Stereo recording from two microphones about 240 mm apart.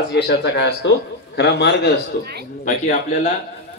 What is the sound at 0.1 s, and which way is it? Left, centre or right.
A man's voice, left.